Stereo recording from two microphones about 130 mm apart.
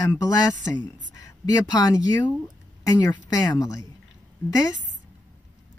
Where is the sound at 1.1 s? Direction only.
25° left (ahead or behind).